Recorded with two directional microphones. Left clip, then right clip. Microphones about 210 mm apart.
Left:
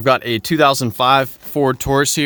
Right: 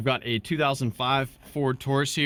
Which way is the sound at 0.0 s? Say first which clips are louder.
Left 11 dB; 45° left (ahead or behind).